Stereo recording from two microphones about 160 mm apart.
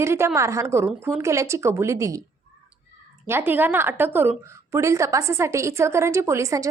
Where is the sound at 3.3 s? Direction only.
15° right (ahead or behind).